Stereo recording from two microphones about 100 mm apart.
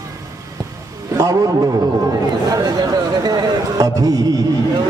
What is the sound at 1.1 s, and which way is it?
Speech, 35° right (ahead or behind).